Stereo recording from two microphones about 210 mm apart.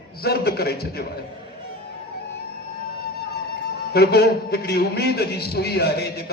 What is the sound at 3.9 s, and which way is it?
A man's voice, 50° left (ahead or behind).